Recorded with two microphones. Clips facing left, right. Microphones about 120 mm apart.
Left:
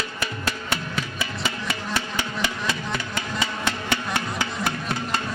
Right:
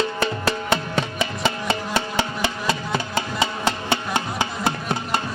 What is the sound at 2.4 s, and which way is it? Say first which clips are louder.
Music: right 3 dB; 30° right (ahead or behind).